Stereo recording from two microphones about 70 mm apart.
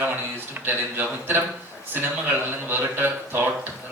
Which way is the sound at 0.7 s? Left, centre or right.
Right.